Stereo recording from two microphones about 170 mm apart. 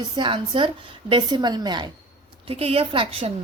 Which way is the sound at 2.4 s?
35° right (ahead or behind).